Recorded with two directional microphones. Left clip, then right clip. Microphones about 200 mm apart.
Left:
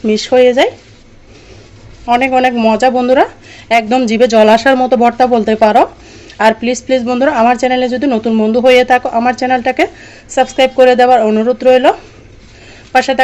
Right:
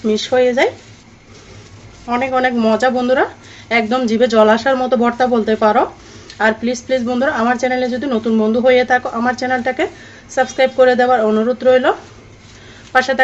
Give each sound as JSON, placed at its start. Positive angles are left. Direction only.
{"t": 0.1, "sound": "speech", "side_deg": 45}
{"t": 2.0, "sound": "speech", "side_deg": 35}
{"t": 12.9, "sound": "speech", "side_deg": 35}